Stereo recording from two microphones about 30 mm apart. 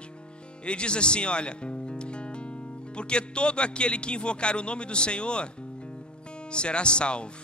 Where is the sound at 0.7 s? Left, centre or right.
Left.